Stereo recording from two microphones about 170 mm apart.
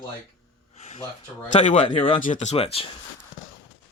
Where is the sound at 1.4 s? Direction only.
45° left (ahead or behind).